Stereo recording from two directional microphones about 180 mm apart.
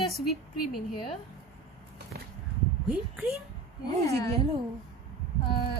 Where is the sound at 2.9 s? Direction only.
5° right (ahead or behind).